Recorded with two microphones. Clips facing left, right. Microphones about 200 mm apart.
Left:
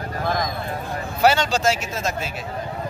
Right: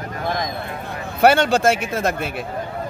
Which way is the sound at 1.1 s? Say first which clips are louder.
Right 4 dB; 55° right (ahead or behind).